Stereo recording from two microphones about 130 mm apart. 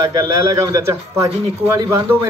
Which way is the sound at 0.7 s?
25° right (ahead or behind).